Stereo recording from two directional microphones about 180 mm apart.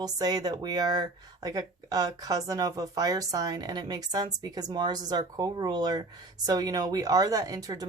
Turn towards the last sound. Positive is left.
turn(degrees=-20)  # may be behind; listen again after turning